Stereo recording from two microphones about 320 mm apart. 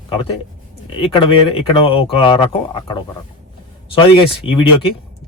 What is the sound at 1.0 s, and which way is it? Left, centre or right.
Speech, centre.